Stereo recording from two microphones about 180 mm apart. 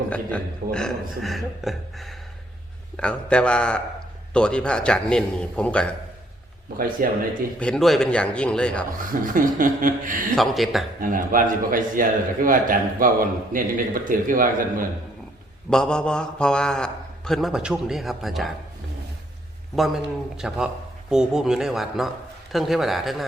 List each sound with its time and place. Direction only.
0.1 s a man's voice: 5° left (ahead or behind)
6.7 s a man's voice: 50° right (ahead or behind)
7.6 s a man's voice: 5° left (ahead or behind)
9.2 s a man's voice: 50° right (ahead or behind)
10.3 s a man's voice: centre (ahead or behind)
11.0 s a man's voice: 50° right (ahead or behind)
15.7 s a man's voice: 5° left (ahead or behind)
19.7 s a man's voice: centre (ahead or behind)